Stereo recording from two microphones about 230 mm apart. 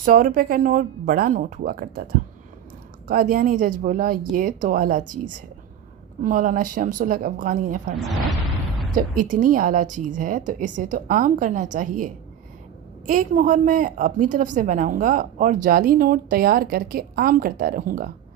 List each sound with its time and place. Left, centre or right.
0.0 s a woman's voice: right
3.1 s a woman's voice: right
9.0 s a woman's voice: right